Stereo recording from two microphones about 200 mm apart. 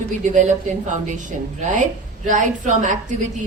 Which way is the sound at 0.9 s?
40° right (ahead or behind).